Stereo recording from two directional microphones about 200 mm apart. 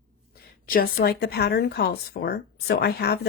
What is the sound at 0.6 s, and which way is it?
Speech, 50° left (ahead or behind).